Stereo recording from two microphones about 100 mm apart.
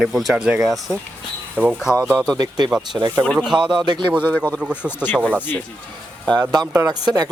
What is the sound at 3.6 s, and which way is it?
Speech, 5° right (ahead or behind).